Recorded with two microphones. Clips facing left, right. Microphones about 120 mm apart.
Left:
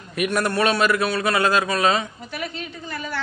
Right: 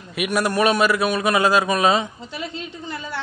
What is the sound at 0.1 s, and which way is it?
A woman's voice, 10° right (ahead or behind).